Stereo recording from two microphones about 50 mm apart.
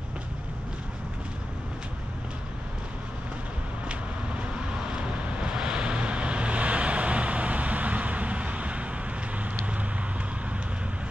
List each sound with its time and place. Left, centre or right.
3.9 s vehicle: right